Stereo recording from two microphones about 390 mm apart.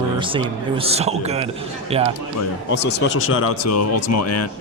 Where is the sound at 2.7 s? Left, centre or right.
Left.